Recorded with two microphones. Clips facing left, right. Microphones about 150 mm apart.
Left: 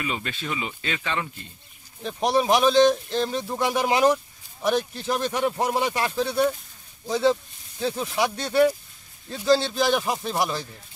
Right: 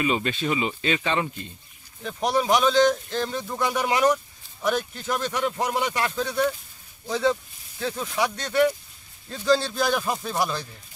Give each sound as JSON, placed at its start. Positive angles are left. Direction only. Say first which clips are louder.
{"t": 0.0, "sound": "speech", "louder": "right 6 dB", "side_deg": -25}
{"t": 2.0, "sound": "speech", "louder": "left 1 dB", "side_deg": 15}
{"t": 9.3, "sound": "a man's voice", "louder": "left 1 dB", "side_deg": 5}
{"t": 9.9, "sound": "speech", "louder": "left 1 dB", "side_deg": 20}